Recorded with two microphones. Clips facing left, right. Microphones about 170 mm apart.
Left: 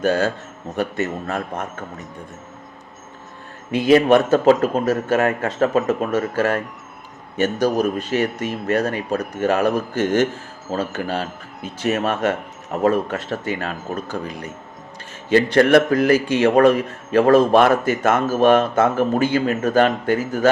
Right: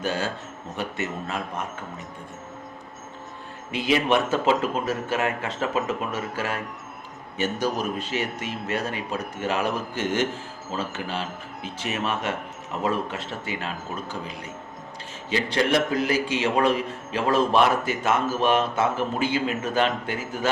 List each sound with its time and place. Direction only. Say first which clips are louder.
0.0 s a man's voice: left 8 dB; 45° left (ahead or behind)
3.7 s a man's voice: left 9 dB; 45° left (ahead or behind)